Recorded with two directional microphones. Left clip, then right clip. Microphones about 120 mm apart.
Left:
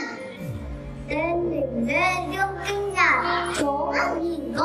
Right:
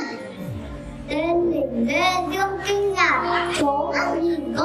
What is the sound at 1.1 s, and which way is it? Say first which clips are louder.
Child singing: right 3 dB; 10° right (ahead or behind).